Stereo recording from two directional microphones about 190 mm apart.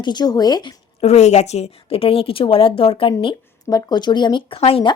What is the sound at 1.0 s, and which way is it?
Speech, 35° left (ahead or behind).